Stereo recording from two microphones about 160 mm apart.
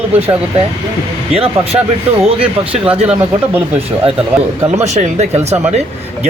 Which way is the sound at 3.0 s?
10° right (ahead or behind).